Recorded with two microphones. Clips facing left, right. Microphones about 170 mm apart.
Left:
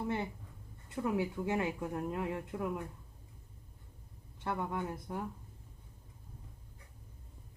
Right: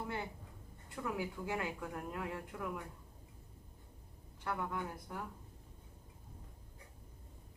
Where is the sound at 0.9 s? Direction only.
25° left (ahead or behind).